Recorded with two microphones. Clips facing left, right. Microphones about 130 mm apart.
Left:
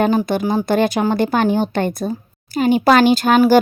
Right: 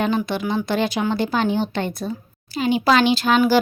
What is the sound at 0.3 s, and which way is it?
Speech, 40° left (ahead or behind).